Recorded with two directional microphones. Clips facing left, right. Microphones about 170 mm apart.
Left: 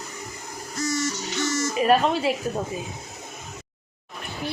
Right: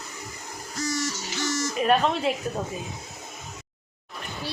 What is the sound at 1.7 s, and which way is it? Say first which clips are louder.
Speech: left 2 dB; centre (ahead or behind).